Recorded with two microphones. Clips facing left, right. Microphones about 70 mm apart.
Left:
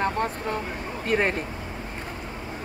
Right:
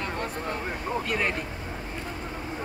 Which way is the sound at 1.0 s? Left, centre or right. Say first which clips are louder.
Left 7 dB; left.